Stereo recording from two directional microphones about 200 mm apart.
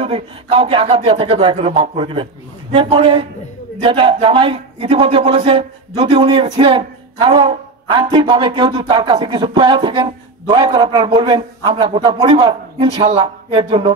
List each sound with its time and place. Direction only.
0.0 s a man's voice: 25° right (ahead or behind)